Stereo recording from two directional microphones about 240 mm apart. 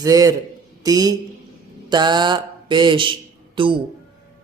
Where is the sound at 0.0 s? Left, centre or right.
Centre.